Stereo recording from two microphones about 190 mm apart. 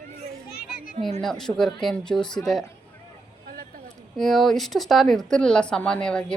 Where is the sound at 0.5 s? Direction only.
55° left (ahead or behind).